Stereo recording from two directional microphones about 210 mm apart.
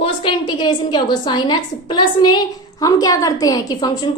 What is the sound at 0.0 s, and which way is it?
A woman's voice, 25° left (ahead or behind).